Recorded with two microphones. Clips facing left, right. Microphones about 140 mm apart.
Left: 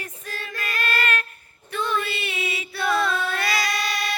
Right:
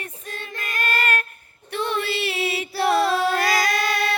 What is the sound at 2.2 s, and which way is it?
Music, 80° right.